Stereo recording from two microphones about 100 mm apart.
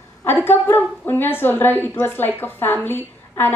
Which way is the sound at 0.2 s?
20° left (ahead or behind).